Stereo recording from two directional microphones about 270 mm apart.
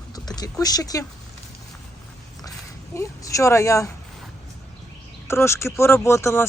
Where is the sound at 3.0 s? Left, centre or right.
Centre.